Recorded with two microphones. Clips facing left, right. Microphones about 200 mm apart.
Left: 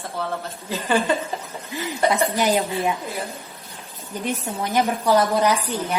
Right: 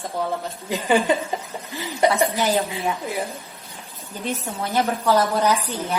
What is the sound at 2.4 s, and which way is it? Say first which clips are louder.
Speech: left 1 dB; 15° left (ahead or behind).